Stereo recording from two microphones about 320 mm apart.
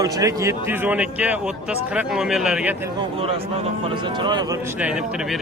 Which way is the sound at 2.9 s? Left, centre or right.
Centre.